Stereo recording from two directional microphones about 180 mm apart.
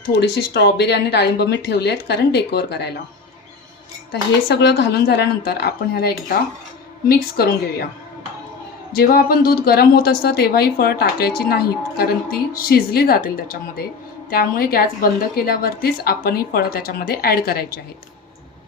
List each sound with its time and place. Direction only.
0.1 s speech: 65° left (ahead or behind)
4.1 s a woman's voice: 75° left (ahead or behind); by 7.9 s 55° left (ahead or behind)
9.0 s a woman's voice: 55° left (ahead or behind)